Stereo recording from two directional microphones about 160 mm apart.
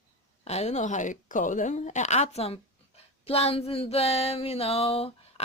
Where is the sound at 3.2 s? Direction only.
40° left (ahead or behind).